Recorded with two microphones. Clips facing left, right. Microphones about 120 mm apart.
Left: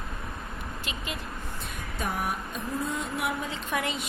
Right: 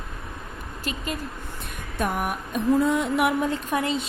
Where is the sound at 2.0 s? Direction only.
60° right (ahead or behind).